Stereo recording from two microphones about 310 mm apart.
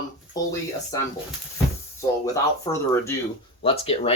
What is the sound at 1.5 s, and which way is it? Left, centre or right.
Cupboard open or close, centre.